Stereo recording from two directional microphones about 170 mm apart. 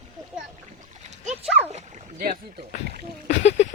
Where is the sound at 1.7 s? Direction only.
55° right (ahead or behind).